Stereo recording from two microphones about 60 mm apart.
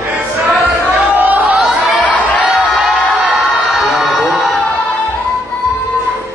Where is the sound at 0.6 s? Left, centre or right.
Right.